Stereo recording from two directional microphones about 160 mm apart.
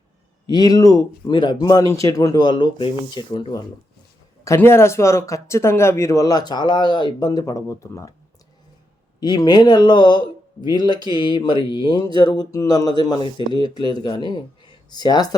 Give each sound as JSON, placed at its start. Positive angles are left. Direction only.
{"t": 0.4, "sound": "speech", "side_deg": 25}
{"t": 4.4, "sound": "speech", "side_deg": 15}
{"t": 9.2, "sound": "speech", "side_deg": 25}
{"t": 11.2, "sound": "mantra", "side_deg": 30}
{"t": 12.1, "sound": "speech", "side_deg": 25}